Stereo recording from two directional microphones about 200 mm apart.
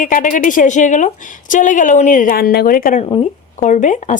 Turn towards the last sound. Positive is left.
turn(degrees=40)  # may be behind; listen again after turning